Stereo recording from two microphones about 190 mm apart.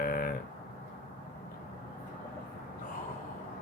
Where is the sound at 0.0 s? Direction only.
50° left (ahead or behind).